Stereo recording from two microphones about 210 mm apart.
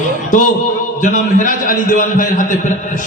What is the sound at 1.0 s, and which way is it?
A man's voice, 35° left (ahead or behind).